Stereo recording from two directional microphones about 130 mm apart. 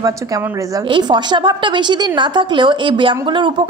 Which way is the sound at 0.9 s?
35° right (ahead or behind).